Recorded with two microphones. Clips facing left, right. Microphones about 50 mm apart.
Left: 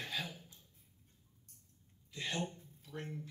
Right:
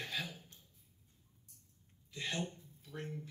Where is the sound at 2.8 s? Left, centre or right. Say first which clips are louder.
Even; centre.